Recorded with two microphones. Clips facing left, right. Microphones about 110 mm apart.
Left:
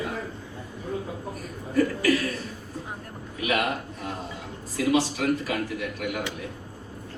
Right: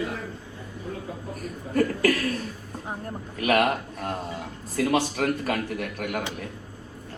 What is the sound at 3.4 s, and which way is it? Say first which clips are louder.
A man's voice: right 4 dB; 50° right (ahead or behind).